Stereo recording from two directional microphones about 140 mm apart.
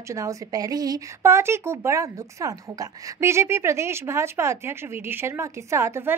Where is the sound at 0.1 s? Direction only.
25° right (ahead or behind).